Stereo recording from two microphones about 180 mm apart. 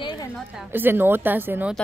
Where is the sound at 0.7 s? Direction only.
10° right (ahead or behind).